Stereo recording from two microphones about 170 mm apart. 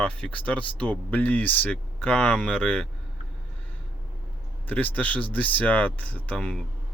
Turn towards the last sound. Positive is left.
turn(degrees=5)  # may be behind; listen again after turning